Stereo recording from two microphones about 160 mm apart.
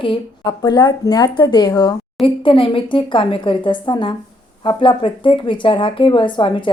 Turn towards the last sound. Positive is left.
turn(degrees=30)  # may be behind; listen again after turning